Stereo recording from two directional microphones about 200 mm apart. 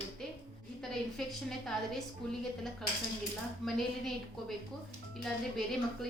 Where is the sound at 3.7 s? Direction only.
Centre (ahead or behind).